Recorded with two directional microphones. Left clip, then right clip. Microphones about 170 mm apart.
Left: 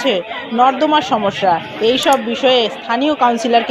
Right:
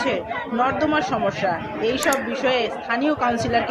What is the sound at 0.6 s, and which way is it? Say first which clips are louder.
A man's voice: left 9 dB; 30° left (ahead or behind).